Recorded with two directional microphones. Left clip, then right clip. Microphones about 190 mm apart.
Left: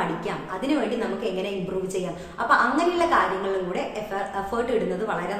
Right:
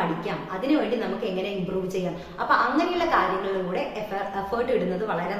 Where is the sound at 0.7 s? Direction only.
10° left (ahead or behind).